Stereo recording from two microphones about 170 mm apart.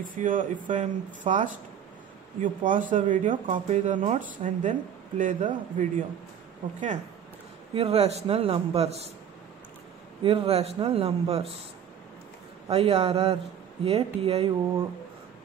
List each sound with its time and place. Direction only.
0.0 s speech: 50° right (ahead or behind)
7.7 s a man's voice: 35° right (ahead or behind)
10.2 s a man's voice: 35° right (ahead or behind)
12.6 s a man's voice: 35° right (ahead or behind)